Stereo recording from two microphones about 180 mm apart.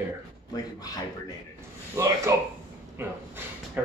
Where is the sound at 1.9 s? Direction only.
15° right (ahead or behind).